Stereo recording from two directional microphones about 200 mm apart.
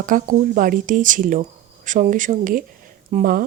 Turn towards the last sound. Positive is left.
turn(degrees=-45)  # may be behind; listen again after turning